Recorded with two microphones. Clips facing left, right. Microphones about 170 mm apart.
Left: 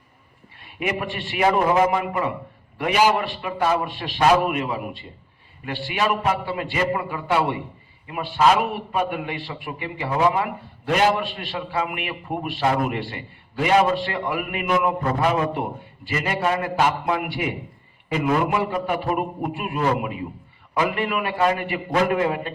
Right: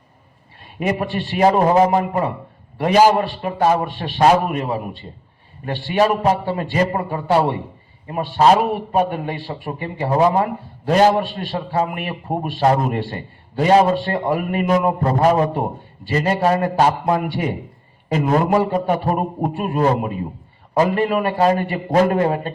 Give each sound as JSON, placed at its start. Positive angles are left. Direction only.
{"t": 0.6, "sound": "a man's voice", "side_deg": -35}